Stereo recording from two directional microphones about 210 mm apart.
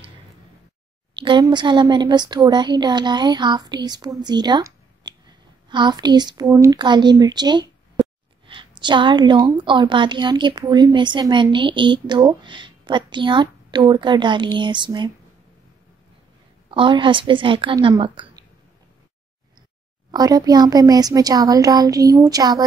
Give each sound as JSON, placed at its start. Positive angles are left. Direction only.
{"t": 1.1, "sound": "a woman's voice", "side_deg": -20}
{"t": 16.7, "sound": "a woman's voice", "side_deg": -25}
{"t": 20.1, "sound": "speech", "side_deg": -20}